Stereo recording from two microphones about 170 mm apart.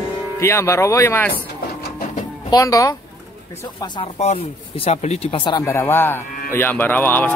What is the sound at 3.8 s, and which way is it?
Speech, 35° left (ahead or behind).